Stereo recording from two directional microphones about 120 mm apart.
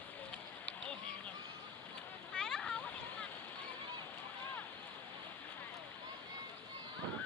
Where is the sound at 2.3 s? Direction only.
5° left (ahead or behind).